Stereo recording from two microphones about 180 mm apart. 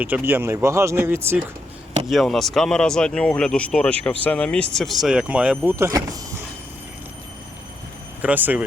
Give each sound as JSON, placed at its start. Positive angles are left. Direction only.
{"t": 0.0, "sound": "speech", "side_deg": -10}
{"t": 2.0, "sound": "speech", "side_deg": 0}
{"t": 5.7, "sound": "speech", "side_deg": -15}
{"t": 8.2, "sound": "speech", "side_deg": -10}